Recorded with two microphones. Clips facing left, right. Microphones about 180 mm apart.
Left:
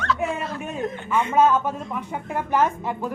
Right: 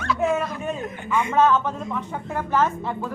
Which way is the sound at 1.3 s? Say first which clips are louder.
Even; 10° left (ahead or behind).